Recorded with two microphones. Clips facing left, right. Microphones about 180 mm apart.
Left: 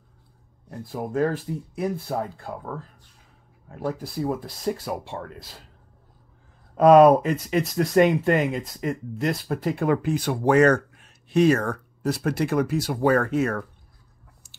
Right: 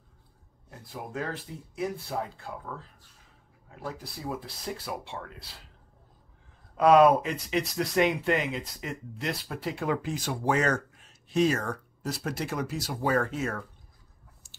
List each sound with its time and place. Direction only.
0.7 s speech: 45° left (ahead or behind)
6.8 s speech: 45° left (ahead or behind); by 13.7 s 65° left (ahead or behind)